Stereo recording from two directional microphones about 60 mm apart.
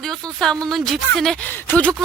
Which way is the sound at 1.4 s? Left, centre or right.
Left.